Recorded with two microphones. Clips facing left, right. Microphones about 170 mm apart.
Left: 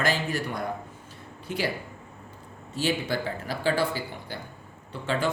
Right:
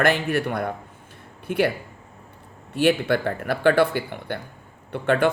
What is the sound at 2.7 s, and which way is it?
A man's voice, 60° right (ahead or behind).